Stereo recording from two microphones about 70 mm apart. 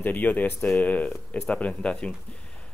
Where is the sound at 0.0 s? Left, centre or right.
Left.